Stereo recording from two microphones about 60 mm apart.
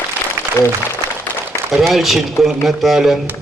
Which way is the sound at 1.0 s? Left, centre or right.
Right.